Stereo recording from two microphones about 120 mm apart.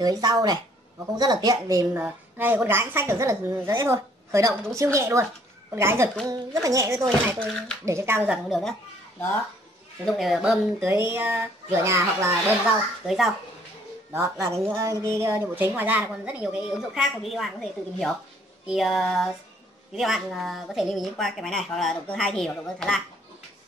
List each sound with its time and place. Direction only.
0.0 s speech: 35° right (ahead or behind)
2.0 s a woman's voice: 15° right (ahead or behind)
7.3 s speech: 10° left (ahead or behind)
7.8 s a woman's voice: 20° right (ahead or behind)
8.5 s a woman's voice: centre (ahead or behind)
10.0 s a woman's voice: centre (ahead or behind)
11.1 s a woman's voice: 20° right (ahead or behind)
12.6 s a woman's voice: 5° right (ahead or behind)
14.7 s a woman's voice: 25° right (ahead or behind); by 22.9 s 5° left (ahead or behind)